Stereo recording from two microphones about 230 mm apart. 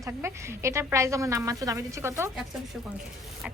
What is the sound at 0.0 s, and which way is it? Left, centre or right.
A woman's voice, centre.